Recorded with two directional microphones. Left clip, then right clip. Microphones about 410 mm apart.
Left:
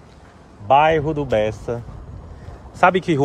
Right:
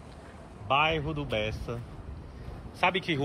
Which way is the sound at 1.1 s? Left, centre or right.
Centre.